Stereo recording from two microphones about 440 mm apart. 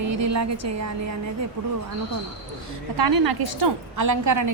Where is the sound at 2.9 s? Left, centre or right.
Right.